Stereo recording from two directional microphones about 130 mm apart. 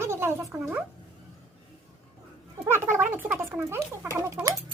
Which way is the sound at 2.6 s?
20° right (ahead or behind).